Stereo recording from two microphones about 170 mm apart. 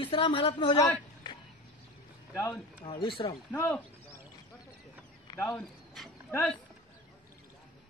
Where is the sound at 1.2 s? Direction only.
30° left (ahead or behind).